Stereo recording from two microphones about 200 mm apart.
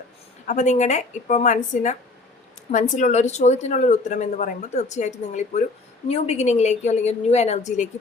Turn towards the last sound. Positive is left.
turn(degrees=35)  # may be behind; listen again after turning